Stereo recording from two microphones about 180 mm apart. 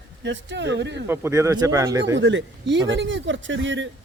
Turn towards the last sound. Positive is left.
turn(degrees=-90)